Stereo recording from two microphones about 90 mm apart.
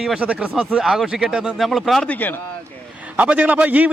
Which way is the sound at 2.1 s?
20° left (ahead or behind).